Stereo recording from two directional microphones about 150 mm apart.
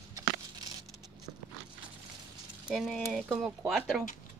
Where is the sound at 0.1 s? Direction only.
25° right (ahead or behind).